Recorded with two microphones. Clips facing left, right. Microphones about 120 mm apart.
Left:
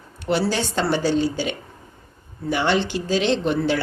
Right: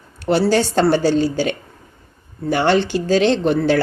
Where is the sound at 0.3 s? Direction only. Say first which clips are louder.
Right 6 dB; 40° right (ahead or behind).